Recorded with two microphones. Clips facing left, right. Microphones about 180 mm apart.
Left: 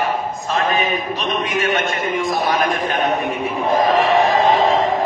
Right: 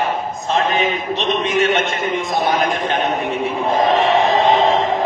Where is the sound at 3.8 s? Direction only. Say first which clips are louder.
Right 1 dB; 25° right (ahead or behind).